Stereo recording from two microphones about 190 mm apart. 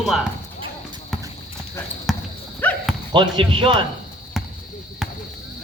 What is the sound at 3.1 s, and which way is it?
Speech, 25° right (ahead or behind).